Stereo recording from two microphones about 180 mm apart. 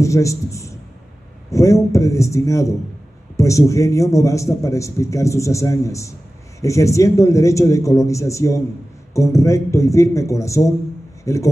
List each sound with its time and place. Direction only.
0.0 s a man's voice: 15° left (ahead or behind)